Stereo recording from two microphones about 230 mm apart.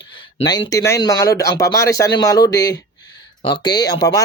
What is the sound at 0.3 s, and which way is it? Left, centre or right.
Speech, centre.